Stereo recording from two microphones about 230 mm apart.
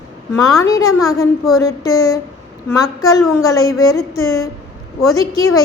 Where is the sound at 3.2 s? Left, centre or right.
Centre.